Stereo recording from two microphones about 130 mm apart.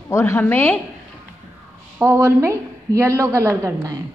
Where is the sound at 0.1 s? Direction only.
20° left (ahead or behind).